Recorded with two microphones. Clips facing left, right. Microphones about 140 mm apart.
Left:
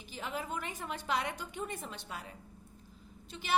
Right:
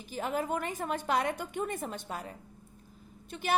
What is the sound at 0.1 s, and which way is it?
A woman's voice, 45° right (ahead or behind).